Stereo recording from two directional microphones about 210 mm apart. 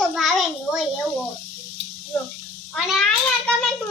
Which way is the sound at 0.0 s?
Centre (ahead or behind).